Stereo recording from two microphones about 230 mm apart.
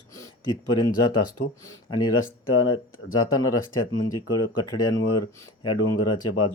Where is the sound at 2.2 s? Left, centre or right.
Left.